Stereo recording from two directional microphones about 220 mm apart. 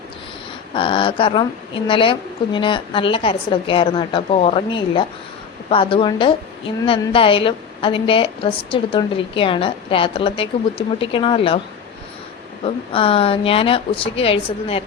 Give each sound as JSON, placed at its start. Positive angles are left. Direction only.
{"t": 0.7, "sound": "a woman's voice", "side_deg": 25}
{"t": 12.6, "sound": "a woman's voice", "side_deg": 25}